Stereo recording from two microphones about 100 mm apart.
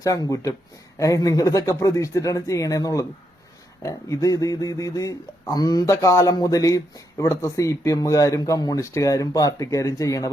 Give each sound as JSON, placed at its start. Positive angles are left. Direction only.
{"t": 0.0, "sound": "speech", "side_deg": 35}